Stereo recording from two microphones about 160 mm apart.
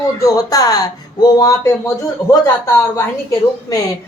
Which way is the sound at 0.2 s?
20° left (ahead or behind).